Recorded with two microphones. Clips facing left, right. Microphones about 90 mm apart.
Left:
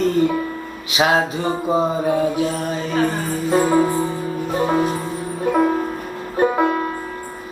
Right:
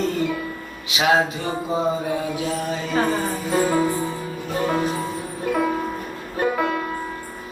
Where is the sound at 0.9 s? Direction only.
35° left (ahead or behind).